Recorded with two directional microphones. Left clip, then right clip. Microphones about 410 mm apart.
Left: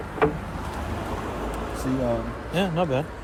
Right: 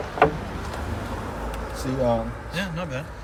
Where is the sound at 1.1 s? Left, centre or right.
Centre.